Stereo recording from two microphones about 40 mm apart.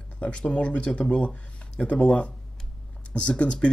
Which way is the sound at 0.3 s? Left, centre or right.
Left.